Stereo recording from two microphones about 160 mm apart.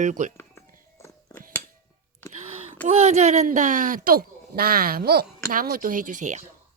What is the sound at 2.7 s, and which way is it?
Speech, 40° right (ahead or behind).